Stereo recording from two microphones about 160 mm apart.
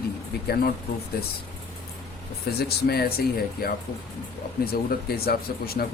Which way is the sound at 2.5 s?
85° left.